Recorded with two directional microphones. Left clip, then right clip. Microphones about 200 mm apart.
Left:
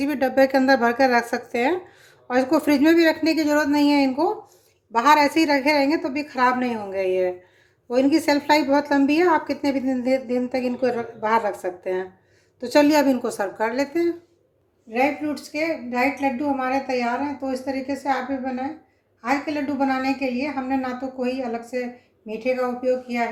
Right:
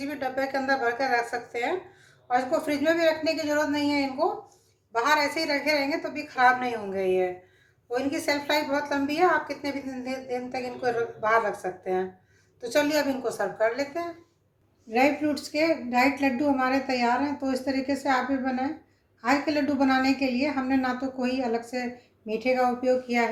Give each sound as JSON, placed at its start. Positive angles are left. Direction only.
{"t": 0.0, "sound": "a woman's voice", "side_deg": 55}
{"t": 14.8, "sound": "a woman's voice", "side_deg": -5}